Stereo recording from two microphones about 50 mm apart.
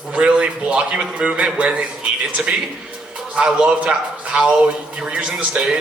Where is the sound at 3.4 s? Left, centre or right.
Centre.